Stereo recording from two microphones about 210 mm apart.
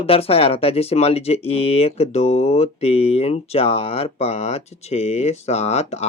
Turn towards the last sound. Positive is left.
turn(degrees=30)  # may be behind; listen again after turning